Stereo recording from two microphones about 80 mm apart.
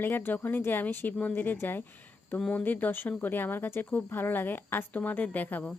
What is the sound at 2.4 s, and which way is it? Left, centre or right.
Speech, centre.